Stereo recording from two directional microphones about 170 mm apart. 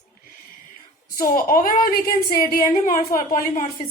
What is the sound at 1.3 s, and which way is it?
A woman's voice, 55° left (ahead or behind).